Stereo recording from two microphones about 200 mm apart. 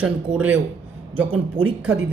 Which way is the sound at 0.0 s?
5° right (ahead or behind).